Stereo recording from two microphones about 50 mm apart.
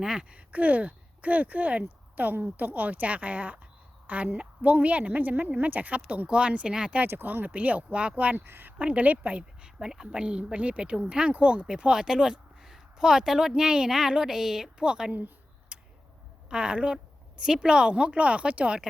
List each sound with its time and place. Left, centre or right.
0.0 s a woman's voice: centre
6.2 s a woman's voice: right
7.1 s a woman's voice: right
8.4 s speech: right
8.8 s a woman's voice: right
15.7 s a sound: right
16.5 s a woman's voice: centre